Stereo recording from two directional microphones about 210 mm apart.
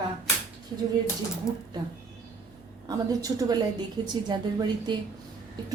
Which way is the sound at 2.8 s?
15° right (ahead or behind).